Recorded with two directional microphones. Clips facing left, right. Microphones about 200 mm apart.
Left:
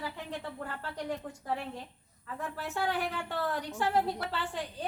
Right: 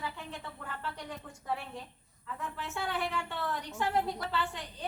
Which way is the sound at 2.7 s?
40° left (ahead or behind).